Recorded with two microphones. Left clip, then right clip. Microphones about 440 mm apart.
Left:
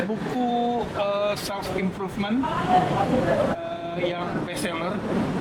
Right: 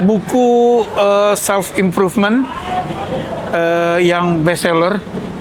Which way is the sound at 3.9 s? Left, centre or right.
Right.